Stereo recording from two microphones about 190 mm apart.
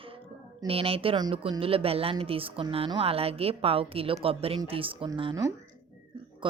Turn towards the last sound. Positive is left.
turn(degrees=-25)  # may be behind; listen again after turning